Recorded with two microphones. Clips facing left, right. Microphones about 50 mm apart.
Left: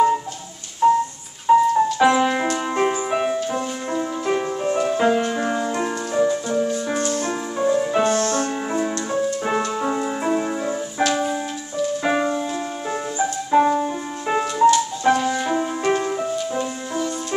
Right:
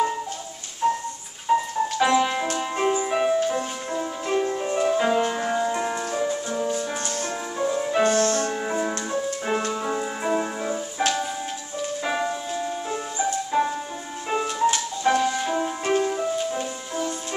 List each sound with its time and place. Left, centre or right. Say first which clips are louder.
0.8 s music: left 7 dB; centre
7.0 s music: left 6 dB; left
7.5 s music: left 5 dB; centre
8.0 s music: left 1 dB; left
8.6 s music: left 3 dB; centre
12.0 s music: left 4 dB; centre